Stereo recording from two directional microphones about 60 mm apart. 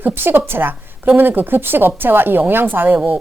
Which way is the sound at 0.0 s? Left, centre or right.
Right.